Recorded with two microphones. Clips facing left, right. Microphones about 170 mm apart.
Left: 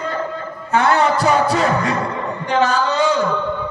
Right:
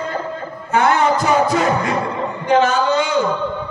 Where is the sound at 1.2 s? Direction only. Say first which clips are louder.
Even; 35° left (ahead or behind).